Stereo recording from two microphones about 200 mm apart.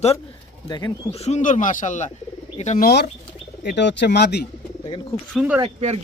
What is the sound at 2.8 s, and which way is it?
Speech, 55° left (ahead or behind).